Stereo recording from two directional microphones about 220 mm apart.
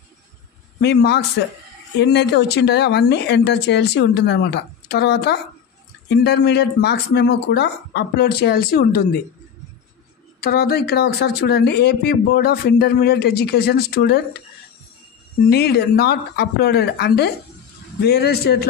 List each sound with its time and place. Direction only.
0.7 s speech: 50° left (ahead or behind)
10.4 s speech: 45° left (ahead or behind)
15.5 s speech: 45° left (ahead or behind)